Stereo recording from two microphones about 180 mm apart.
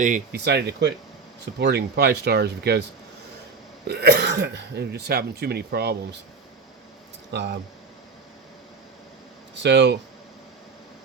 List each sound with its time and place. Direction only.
0.0 s speech: 45° right (ahead or behind)
0.3 s speech: 65° right (ahead or behind)
3.8 s speech: 65° right (ahead or behind)
7.3 s speech: 65° right (ahead or behind)
9.6 s speech: 75° right (ahead or behind)